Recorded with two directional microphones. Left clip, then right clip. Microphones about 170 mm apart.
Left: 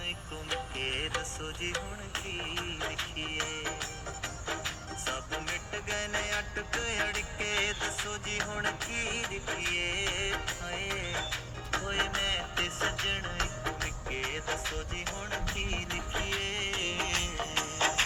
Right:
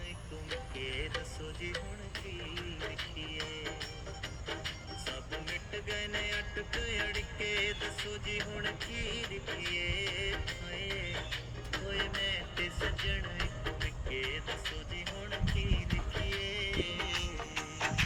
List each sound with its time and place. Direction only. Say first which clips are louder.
0.5 s music: left 6 dB; 20° left (ahead or behind)
2.4 s music: left 5 dB; 20° left (ahead or behind)
5.0 s music: left 6 dB; 20° left (ahead or behind)